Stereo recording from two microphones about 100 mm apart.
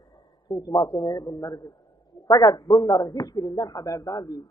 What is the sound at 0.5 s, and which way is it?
Speech, 50° left (ahead or behind).